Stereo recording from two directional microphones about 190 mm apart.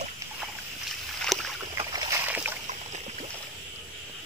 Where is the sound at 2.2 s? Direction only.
10° right (ahead or behind).